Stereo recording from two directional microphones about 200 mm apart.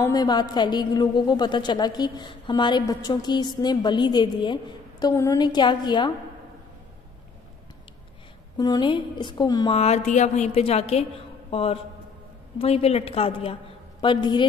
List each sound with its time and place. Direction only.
0.0 s a woman's voice: 20° left (ahead or behind)
8.5 s a woman's voice: 20° left (ahead or behind)
9.8 s a woman's voice: 35° left (ahead or behind)